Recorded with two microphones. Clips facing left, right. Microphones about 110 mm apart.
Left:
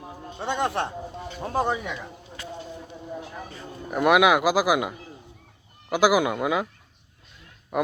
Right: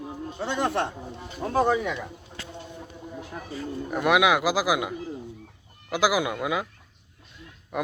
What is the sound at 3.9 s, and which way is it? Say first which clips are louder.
Speech: left 3 dB; 15° left (ahead or behind).